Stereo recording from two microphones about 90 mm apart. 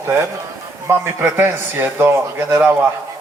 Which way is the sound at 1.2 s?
25° right (ahead or behind).